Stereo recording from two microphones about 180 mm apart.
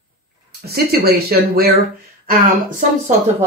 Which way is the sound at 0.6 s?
60° right (ahead or behind).